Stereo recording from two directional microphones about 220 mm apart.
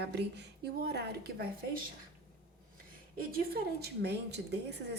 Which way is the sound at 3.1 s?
45° right (ahead or behind).